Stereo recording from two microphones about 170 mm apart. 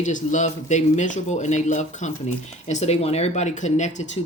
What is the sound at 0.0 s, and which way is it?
Speech, 45° left (ahead or behind).